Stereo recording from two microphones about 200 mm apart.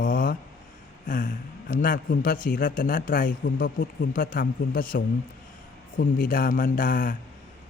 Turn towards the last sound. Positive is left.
turn(degrees=45)  # may be behind; listen again after turning